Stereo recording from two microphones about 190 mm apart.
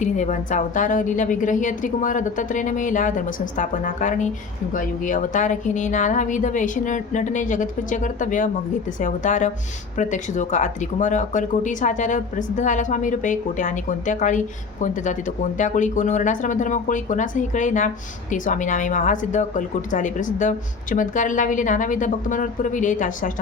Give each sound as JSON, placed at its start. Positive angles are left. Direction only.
{"t": 0.0, "sound": "a woman's voice", "side_deg": 40}